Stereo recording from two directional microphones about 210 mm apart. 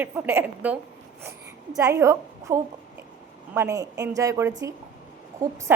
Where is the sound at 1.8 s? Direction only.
15° right (ahead or behind).